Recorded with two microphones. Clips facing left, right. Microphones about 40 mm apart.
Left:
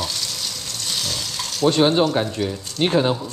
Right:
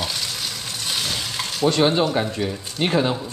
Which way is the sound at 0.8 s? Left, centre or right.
Right.